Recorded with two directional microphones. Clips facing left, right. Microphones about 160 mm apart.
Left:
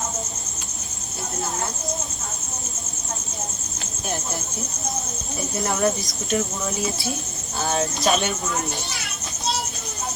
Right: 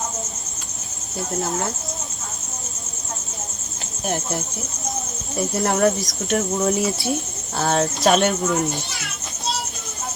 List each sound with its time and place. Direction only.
5.6 s speech: 70° right (ahead or behind)
7.6 s speech: 70° right (ahead or behind)